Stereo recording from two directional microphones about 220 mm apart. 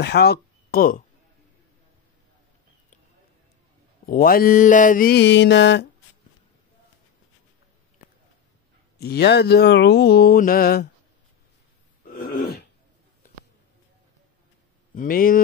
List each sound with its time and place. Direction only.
0.0 s speech: 45° left (ahead or behind)
4.0 s mantra: 40° left (ahead or behind)
8.9 s mantra: 45° left (ahead or behind)
12.1 s throat clearing: 40° left (ahead or behind)
15.0 s mantra: 40° left (ahead or behind)